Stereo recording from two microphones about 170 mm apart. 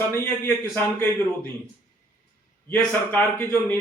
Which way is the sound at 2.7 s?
10° left (ahead or behind).